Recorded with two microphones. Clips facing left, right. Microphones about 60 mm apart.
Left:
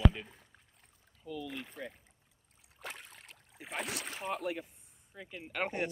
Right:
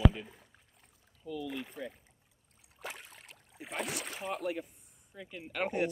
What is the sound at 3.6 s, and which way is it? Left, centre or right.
Speech, centre.